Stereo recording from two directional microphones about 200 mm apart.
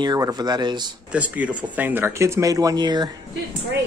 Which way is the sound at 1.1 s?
5° right (ahead or behind).